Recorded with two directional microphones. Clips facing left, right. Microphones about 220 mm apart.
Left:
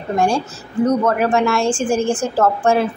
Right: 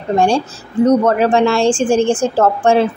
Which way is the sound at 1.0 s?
30° right (ahead or behind).